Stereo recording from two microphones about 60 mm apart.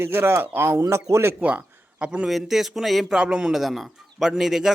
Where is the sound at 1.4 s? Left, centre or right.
Right.